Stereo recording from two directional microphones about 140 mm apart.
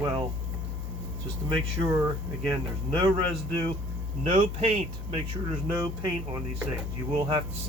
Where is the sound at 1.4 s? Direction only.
35° right (ahead or behind).